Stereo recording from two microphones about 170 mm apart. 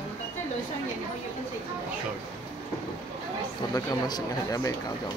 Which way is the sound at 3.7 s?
20° left (ahead or behind).